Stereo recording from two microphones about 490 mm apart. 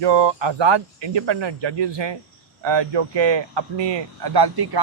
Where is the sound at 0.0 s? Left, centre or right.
Right.